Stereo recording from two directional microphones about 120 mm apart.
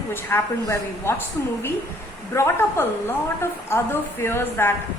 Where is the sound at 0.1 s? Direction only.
20° left (ahead or behind).